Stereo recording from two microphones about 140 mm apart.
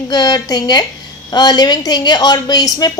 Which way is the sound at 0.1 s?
30° left (ahead or behind).